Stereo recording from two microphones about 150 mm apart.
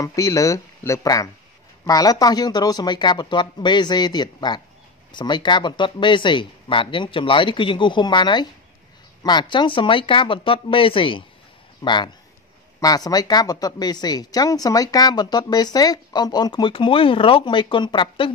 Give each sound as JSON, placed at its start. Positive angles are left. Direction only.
{"t": 0.0, "sound": "speech", "side_deg": 20}